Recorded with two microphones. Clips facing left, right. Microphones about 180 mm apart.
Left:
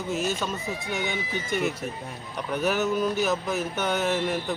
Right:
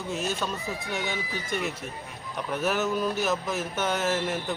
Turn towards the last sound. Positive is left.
turn(degrees=0)  # may be behind; listen again after turning